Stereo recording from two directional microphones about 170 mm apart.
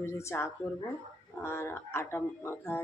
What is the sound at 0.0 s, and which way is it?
Speech, 15° left (ahead or behind).